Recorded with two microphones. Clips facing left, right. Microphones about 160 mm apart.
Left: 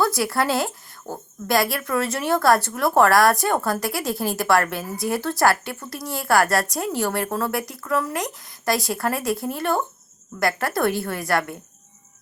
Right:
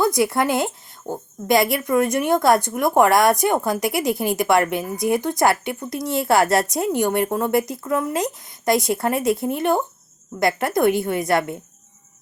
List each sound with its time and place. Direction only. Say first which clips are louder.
0.0 s a woman's voice: right 3 dB; 20° right (ahead or behind)